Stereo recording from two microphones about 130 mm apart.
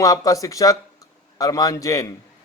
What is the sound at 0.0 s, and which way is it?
A man's voice, 25° left (ahead or behind).